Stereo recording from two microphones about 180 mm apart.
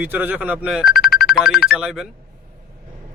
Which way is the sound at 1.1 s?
55° left (ahead or behind).